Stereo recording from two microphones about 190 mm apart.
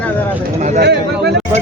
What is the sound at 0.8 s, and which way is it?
Speech, 60° right (ahead or behind).